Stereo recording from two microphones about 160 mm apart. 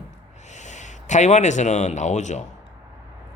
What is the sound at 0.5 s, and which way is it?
Speech, 50° left (ahead or behind).